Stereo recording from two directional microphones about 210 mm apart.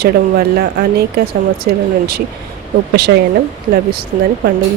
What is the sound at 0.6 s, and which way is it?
Speech, 50° right (ahead or behind).